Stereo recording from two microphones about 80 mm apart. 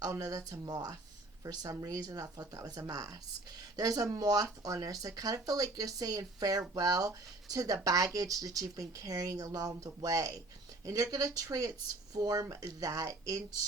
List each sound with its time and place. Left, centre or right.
0.1 s speech: right